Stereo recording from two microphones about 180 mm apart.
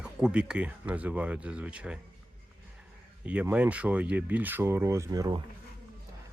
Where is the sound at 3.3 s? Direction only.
10° right (ahead or behind).